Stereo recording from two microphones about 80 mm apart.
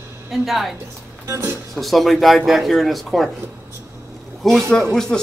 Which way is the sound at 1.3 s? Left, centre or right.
Right.